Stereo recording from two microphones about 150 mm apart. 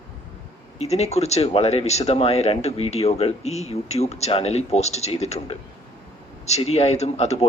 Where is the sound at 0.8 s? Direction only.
45° left (ahead or behind).